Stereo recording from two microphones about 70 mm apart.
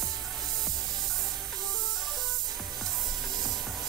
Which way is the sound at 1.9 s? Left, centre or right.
Centre.